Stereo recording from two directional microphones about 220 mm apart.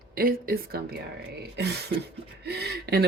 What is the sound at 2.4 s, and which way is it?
Speech, 50° right (ahead or behind).